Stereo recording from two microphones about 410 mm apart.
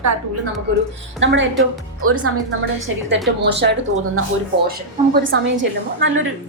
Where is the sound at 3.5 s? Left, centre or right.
Right.